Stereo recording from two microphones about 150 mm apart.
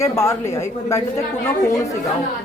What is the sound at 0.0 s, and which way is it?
A woman's voice, 20° left (ahead or behind).